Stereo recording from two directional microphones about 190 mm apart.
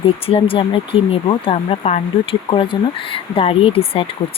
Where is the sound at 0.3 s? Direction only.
30° left (ahead or behind).